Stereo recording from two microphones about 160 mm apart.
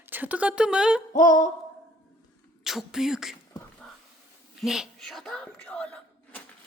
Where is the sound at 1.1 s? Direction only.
55° left (ahead or behind).